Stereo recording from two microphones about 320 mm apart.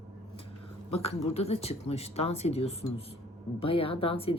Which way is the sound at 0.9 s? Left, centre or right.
Centre.